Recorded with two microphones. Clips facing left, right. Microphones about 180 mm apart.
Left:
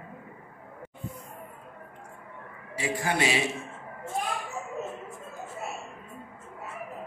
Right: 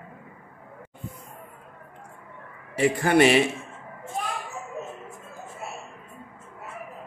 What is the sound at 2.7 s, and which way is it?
Speech, 60° right (ahead or behind).